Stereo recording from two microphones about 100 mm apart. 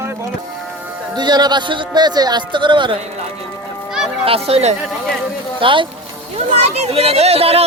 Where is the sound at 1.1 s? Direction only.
45° right (ahead or behind).